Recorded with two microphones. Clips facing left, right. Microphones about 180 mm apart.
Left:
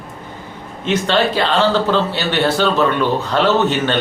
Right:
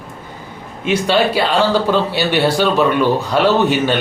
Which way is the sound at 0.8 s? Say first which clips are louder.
Right 1 dB; 10° right (ahead or behind).